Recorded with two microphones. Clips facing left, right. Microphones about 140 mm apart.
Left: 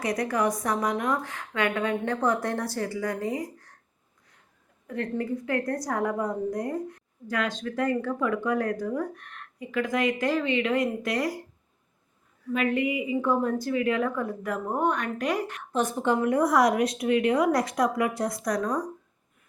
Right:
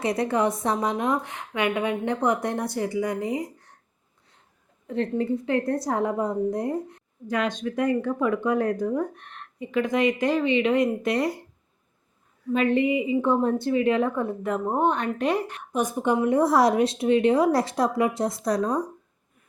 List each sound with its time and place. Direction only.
0.0 s a woman's voice: 25° right (ahead or behind)
4.9 s a woman's voice: 25° right (ahead or behind)
12.5 s a woman's voice: 30° right (ahead or behind)
15.7 s speech: 10° right (ahead or behind)
16.2 s a woman's voice: 25° right (ahead or behind)